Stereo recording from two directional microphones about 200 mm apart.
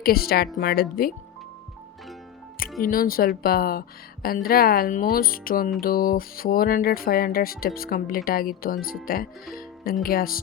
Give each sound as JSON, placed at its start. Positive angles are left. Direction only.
{"t": 0.0, "sound": "speech", "side_deg": 50}
{"t": 2.8, "sound": "speech", "side_deg": 45}
{"t": 10.0, "sound": "speech", "side_deg": 45}